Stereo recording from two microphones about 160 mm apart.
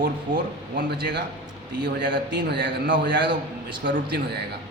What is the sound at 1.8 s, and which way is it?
A man's voice, 90° right.